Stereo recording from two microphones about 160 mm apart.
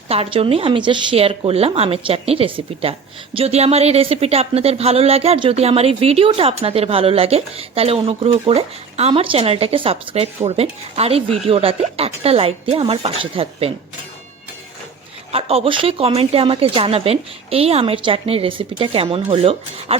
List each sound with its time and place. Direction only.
0.1 s speech: 35° right (ahead or behind)
15.3 s speech: 40° right (ahead or behind)